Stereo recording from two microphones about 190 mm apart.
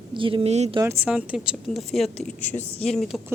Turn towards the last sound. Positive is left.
turn(degrees=0)  # may be behind; listen again after turning